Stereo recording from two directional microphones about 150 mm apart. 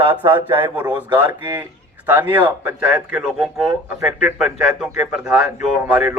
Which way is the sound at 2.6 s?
5° right (ahead or behind).